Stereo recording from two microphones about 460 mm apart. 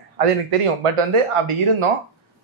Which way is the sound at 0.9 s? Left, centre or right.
Right.